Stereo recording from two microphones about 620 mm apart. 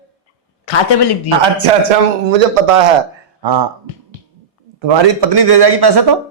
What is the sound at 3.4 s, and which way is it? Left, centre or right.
Speech, right.